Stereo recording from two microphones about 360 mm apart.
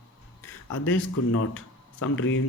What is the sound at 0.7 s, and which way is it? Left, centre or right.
Speech, left.